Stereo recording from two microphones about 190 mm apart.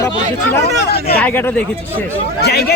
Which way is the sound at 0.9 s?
55° left (ahead or behind).